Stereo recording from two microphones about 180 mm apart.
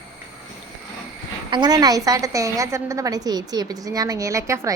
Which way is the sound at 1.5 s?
25° right (ahead or behind).